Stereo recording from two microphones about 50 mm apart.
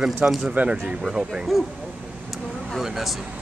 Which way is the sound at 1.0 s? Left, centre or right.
Centre.